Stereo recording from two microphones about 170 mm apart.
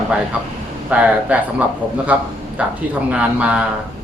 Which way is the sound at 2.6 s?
10° right (ahead or behind).